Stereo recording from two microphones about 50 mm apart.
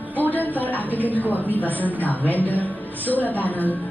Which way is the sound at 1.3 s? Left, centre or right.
Left.